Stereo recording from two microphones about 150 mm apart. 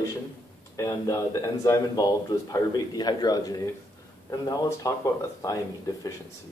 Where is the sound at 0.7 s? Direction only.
20° left (ahead or behind).